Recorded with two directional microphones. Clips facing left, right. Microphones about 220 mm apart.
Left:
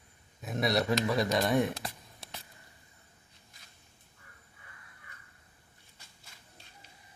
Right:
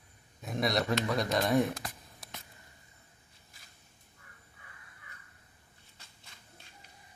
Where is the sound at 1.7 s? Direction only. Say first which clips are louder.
Left 2 dB; 30° left (ahead or behind).